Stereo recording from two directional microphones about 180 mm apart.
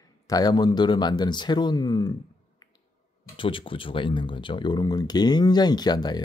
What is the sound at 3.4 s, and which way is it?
Speech, 30° left (ahead or behind).